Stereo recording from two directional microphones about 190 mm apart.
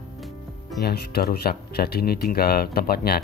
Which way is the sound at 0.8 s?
55° left (ahead or behind).